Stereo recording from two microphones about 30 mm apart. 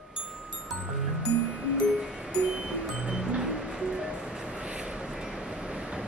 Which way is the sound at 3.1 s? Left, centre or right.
Right.